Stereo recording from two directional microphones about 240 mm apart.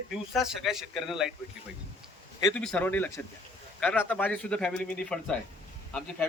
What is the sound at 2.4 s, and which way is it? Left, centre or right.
A man's voice, centre.